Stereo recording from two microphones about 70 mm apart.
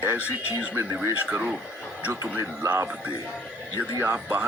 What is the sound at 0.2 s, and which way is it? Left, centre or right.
Speech, left.